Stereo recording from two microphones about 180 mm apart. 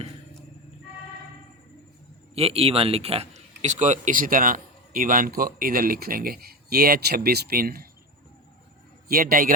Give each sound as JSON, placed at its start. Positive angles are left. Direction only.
{"t": 2.3, "sound": "a man's voice", "side_deg": -35}
{"t": 9.0, "sound": "a man's voice", "side_deg": -55}